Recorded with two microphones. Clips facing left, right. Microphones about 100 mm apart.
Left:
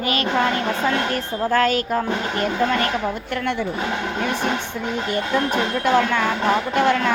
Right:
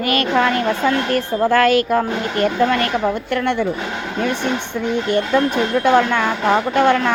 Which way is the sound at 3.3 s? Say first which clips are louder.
Right 5 dB; 55° right (ahead or behind).